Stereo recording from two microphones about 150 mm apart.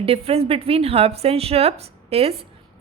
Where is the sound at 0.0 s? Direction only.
40° right (ahead or behind).